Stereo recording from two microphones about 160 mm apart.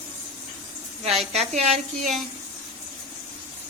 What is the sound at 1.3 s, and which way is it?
Speech, 45° right (ahead or behind).